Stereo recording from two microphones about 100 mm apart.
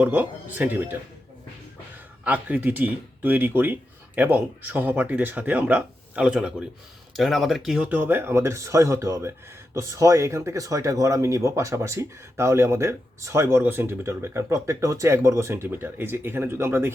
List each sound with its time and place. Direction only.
0.0 s speech: 15° right (ahead or behind)
2.2 s speech: 15° right (ahead or behind)
7.9 s speech: 20° right (ahead or behind)